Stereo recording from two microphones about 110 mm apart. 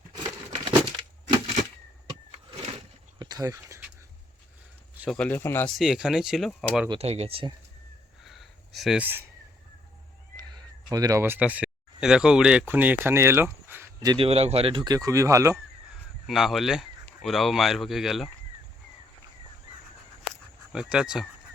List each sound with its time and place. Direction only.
0.5 s a sound: 50° right (ahead or behind)
3.2 s a sound: 35° right (ahead or behind)
5.0 s speech: 10° left (ahead or behind)
5.4 s speech: 20° left (ahead or behind)
5.7 s speech: 5° right (ahead or behind)
7.0 s speech: 70° right (ahead or behind)
8.2 s a sound: centre (ahead or behind)
9.0 s speech: 15° right (ahead or behind)
10.9 s speech: 35° right (ahead or behind)
11.2 s speech: 15° right (ahead or behind)
14.2 s speech: 65° right (ahead or behind)
14.8 s speech: 35° right (ahead or behind)
16.2 s speech: centre (ahead or behind)
20.7 s speech: 5° right (ahead or behind)